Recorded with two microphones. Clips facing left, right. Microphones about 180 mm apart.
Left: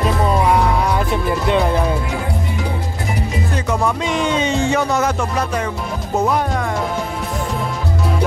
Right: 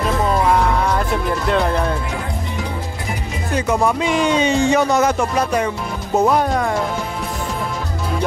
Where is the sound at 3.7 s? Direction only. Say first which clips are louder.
Right 3 dB; 10° right (ahead or behind).